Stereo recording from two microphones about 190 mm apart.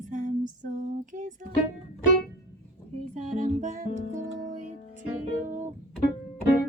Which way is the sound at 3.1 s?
40° right (ahead or behind).